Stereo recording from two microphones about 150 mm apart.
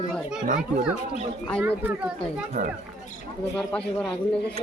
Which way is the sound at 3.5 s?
10° left (ahead or behind).